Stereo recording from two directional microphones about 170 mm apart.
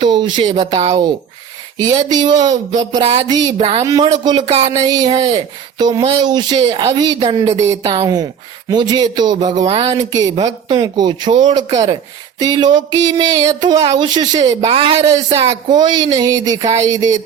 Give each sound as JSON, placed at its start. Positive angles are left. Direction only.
{"t": 0.0, "sound": "speech", "side_deg": -25}
{"t": 3.8, "sound": "speech", "side_deg": -20}
{"t": 4.7, "sound": "speech", "side_deg": -20}
{"t": 9.6, "sound": "speech", "side_deg": -35}
{"t": 10.1, "sound": "speech", "side_deg": -20}
{"t": 14.9, "sound": "speech", "side_deg": -20}